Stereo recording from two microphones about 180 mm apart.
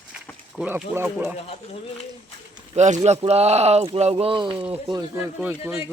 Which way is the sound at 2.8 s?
40° right (ahead or behind).